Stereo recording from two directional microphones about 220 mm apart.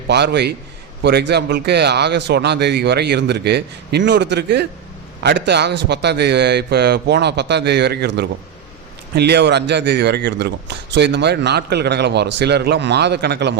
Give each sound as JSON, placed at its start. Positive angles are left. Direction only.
{"t": 0.1, "sound": "a man's voice", "side_deg": -50}